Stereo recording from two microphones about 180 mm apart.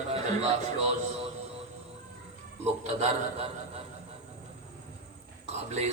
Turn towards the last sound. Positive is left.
turn(degrees=-35)  # may be behind; listen again after turning